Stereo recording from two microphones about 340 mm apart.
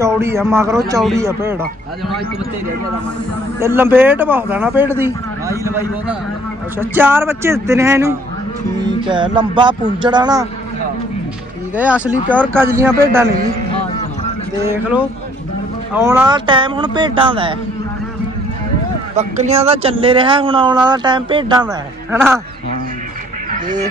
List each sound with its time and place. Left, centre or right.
0.0 s a man's voice: centre
3.6 s a man's voice: centre
9.1 s a man's voice: centre
11.7 s a man's voice: centre
14.6 s a man's voice: centre
19.1 s a man's voice: centre